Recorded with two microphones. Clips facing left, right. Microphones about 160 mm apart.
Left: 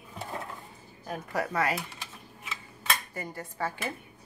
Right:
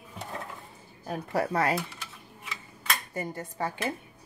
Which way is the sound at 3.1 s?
20° right (ahead or behind).